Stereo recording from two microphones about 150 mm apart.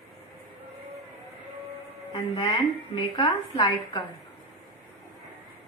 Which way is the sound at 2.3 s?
30° left (ahead or behind).